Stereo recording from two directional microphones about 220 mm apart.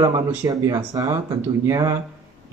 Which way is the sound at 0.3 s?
10° right (ahead or behind).